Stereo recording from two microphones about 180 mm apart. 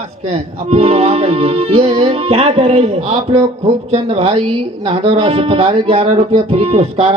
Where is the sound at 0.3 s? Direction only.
35° right (ahead or behind).